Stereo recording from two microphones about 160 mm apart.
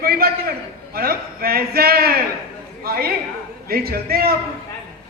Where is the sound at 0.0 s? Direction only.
70° right (ahead or behind).